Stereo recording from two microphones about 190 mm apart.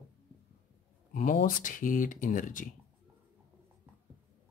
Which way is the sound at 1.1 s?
45° left (ahead or behind).